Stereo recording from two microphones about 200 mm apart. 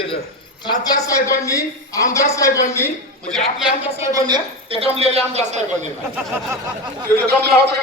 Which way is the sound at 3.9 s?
20° right (ahead or behind).